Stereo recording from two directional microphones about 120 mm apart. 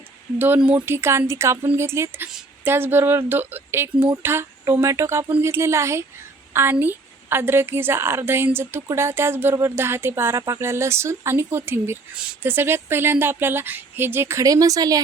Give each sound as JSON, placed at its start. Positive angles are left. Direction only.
{"t": 0.3, "sound": "a woman's voice", "side_deg": -15}